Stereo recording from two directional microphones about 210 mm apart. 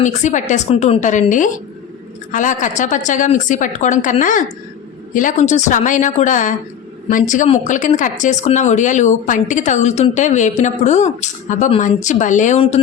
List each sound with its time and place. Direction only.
0.0 s speech: 35° left (ahead or behind)